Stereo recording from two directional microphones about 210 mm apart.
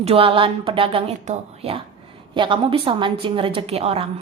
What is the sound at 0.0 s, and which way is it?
A woman's voice, 25° right (ahead or behind).